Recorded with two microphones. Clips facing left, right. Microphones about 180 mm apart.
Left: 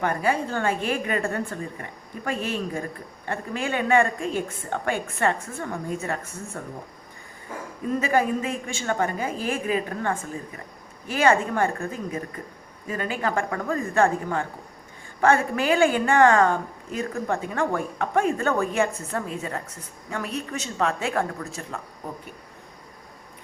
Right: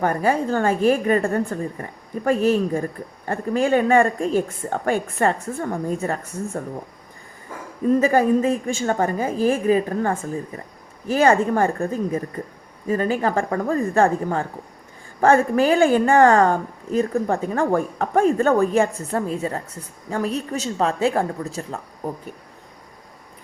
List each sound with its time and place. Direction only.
0.0 s a woman's voice: 40° right (ahead or behind)
8.0 s a woman's voice: 40° right (ahead or behind)